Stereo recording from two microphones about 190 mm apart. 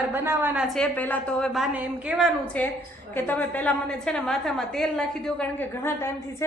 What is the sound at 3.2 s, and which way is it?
A woman's voice, 10° left (ahead or behind).